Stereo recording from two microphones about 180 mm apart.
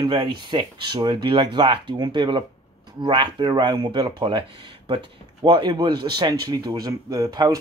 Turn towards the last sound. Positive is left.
turn(degrees=-20)  # may be behind; listen again after turning